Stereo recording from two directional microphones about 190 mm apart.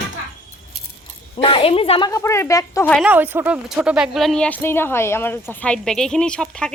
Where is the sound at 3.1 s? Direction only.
10° right (ahead or behind).